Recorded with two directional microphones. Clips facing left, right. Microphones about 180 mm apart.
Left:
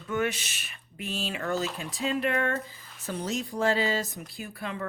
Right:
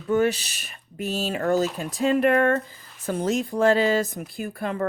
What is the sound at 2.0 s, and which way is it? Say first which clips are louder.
Speech: right 8 dB; 55° right (ahead or behind).